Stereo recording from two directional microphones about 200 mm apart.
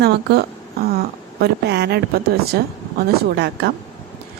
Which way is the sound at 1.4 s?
55° right (ahead or behind).